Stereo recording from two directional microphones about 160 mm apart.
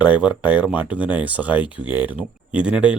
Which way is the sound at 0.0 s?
10° right (ahead or behind).